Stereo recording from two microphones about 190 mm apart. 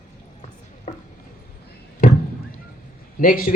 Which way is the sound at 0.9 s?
30° left (ahead or behind).